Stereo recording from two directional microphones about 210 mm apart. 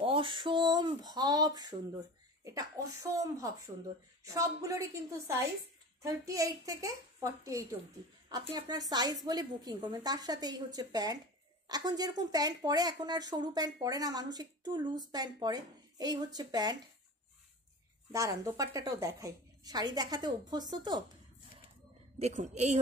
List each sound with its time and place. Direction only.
0.0 s a sound: 25° right (ahead or behind)
2.4 s a woman's voice: 15° right (ahead or behind)
18.1 s speech: 15° right (ahead or behind)
22.2 s a woman's voice: 35° right (ahead or behind)